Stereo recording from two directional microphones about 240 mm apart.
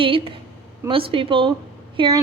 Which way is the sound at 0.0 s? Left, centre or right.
Right.